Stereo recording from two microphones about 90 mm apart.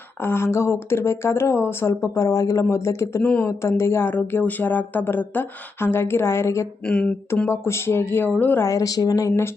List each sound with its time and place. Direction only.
0.2 s speech: 25° left (ahead or behind)
3.2 s a sound: 15° left (ahead or behind)
3.4 s speech: 30° left (ahead or behind)
6.8 s a sound: 10° left (ahead or behind)
7.4 s speech: 30° left (ahead or behind)
8.6 s speech: 40° left (ahead or behind)